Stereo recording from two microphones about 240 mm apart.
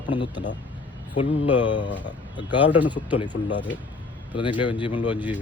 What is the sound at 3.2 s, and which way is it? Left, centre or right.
A man's voice, centre.